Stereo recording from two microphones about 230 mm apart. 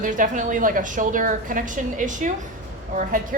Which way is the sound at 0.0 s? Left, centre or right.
Right.